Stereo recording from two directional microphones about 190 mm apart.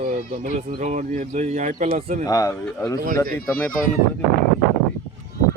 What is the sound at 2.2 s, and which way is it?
Speech, 15° left (ahead or behind).